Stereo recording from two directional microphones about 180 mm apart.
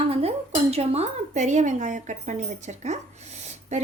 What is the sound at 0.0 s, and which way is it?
Speech, 35° right (ahead or behind).